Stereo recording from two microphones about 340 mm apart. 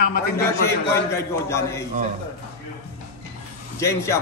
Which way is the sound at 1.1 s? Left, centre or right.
Centre.